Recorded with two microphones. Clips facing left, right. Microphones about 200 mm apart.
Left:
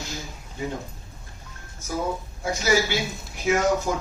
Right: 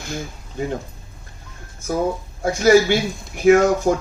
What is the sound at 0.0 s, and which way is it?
Speech, 55° right (ahead or behind).